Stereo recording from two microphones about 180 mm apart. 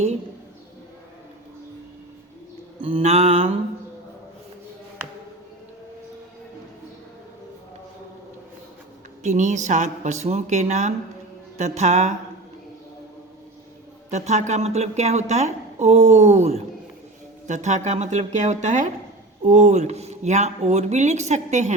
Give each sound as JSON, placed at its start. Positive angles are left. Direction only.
{"t": 2.8, "sound": "a woman's voice", "side_deg": -35}
{"t": 9.2, "sound": "a woman's voice", "side_deg": -40}
{"t": 14.1, "sound": "a woman's voice", "side_deg": -40}